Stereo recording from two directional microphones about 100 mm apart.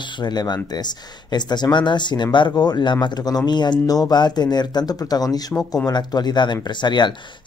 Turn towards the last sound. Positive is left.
turn(degrees=50)  # may be behind; listen again after turning